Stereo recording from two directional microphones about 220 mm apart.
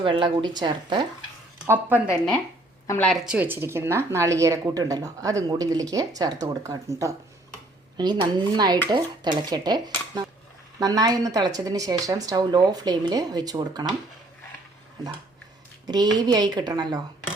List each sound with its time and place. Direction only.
0.0 s speech: 20° right (ahead or behind)
1.6 s a woman's voice: 10° right (ahead or behind)
2.8 s a woman's voice: 10° left (ahead or behind); by 13.9 s 20° right (ahead or behind)
16.1 s speech: 20° right (ahead or behind)